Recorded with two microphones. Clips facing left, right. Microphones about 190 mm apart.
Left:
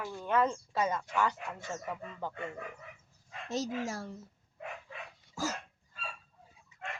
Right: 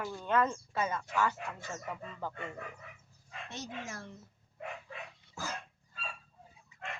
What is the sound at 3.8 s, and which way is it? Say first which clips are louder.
Speech: left 6 dB; 35° left (ahead or behind).